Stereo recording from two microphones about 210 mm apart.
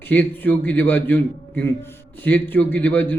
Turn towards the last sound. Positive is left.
turn(degrees=10)  # may be behind; listen again after turning